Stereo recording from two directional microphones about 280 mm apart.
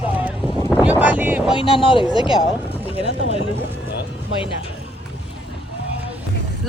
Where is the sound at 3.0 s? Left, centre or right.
Right.